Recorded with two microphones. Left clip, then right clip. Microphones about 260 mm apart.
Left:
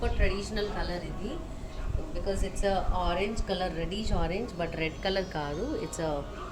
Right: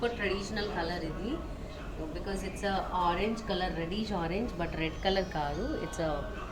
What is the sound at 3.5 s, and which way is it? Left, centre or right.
A woman's voice, left.